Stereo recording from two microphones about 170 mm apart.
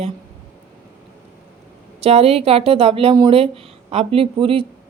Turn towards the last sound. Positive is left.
turn(degrees=-35)  # may be behind; listen again after turning